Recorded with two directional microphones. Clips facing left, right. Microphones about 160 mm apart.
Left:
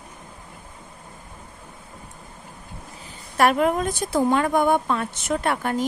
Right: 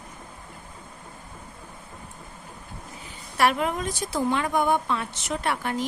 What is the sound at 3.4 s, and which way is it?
A woman's voice, 50° left (ahead or behind).